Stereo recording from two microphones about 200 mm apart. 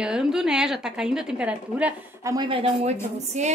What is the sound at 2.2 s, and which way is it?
Speech, 20° right (ahead or behind).